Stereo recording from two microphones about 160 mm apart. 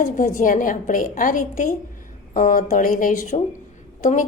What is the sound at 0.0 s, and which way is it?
A woman's voice, 60° left (ahead or behind).